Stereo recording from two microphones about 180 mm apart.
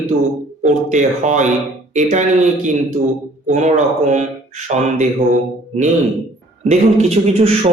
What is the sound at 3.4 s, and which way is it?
A man's voice, 40° right (ahead or behind).